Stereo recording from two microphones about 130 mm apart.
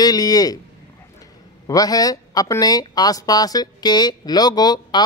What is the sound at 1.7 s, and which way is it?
Speech, 30° left (ahead or behind).